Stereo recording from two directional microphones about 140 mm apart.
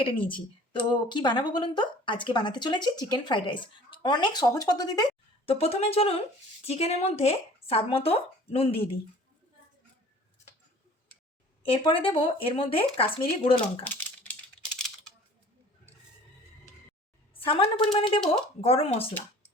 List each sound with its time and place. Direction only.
0.0 s a woman's voice: 40° left (ahead or behind)
5.5 s speech: 45° left (ahead or behind)
11.7 s speech: 40° left (ahead or behind)
13.8 s a sound: 10° left (ahead or behind)
17.3 s speech: 40° left (ahead or behind)